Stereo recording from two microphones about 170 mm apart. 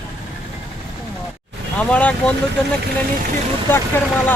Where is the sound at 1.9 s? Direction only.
5° left (ahead or behind).